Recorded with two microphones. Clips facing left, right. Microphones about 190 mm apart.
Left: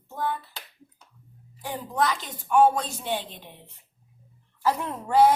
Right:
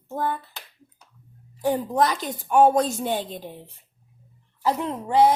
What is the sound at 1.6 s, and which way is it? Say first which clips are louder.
A woman's voice: right 6 dB; 40° right (ahead or behind).